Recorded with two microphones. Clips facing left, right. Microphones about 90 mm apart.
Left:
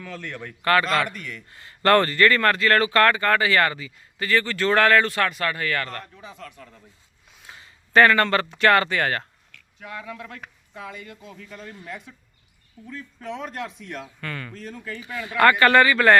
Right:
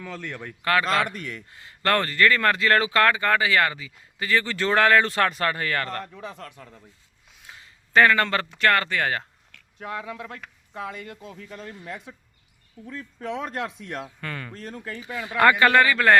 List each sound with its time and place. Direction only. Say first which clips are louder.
0.6 s speech: left 3 dB; 5° right (ahead or behind)
1.1 s speech: right 2 dB; 40° right (ahead or behind)
1.8 s speech: left 4 dB; centre (ahead or behind)
2.5 s speech: left 1 dB; 15° right (ahead or behind)
5.0 s speech: right 1 dB; 30° right (ahead or behind)
7.4 s speech: left 1 dB; 5° left (ahead or behind)
9.5 s a sound: right 5 dB; 35° right (ahead or behind)
10.0 s speech: right 1 dB; 25° right (ahead or behind)
10.8 s speech: right 3 dB; 40° right (ahead or behind)
13.5 s speech: right 2 dB; 40° right (ahead or behind)
14.0 s speech: even; 25° right (ahead or behind)
14.5 s speech: even; 45° right (ahead or behind)
14.8 s speech: even; 25° right (ahead or behind)
15.7 s speech: left 2 dB; centre (ahead or behind)